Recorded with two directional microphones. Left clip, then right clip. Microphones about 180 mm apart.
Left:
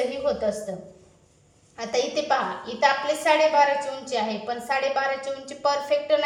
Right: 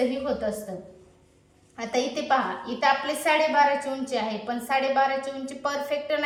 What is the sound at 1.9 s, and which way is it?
A woman's voice, 35° left (ahead or behind).